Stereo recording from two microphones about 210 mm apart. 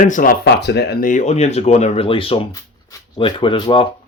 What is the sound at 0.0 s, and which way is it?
Speech, 40° left (ahead or behind).